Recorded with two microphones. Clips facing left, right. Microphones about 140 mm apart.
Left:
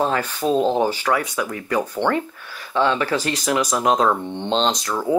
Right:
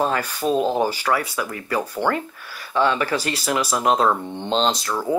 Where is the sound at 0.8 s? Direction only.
10° right (ahead or behind).